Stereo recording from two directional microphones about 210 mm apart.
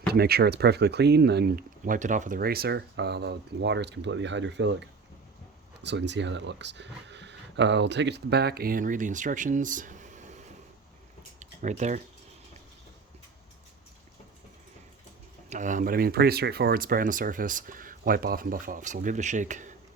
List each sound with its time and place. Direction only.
0.1 s speech: 50° right (ahead or behind)
11.3 s a sound: 35° right (ahead or behind)
15.4 s speech: 35° right (ahead or behind)